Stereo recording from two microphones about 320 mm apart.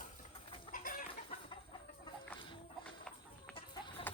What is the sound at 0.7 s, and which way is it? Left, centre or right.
Chicken, left.